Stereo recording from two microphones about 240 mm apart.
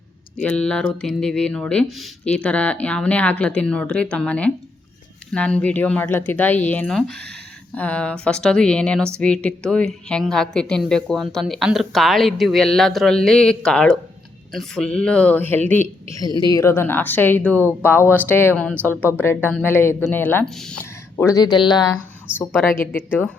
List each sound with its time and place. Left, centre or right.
0.4 s a woman's voice: centre
21.2 s speech: centre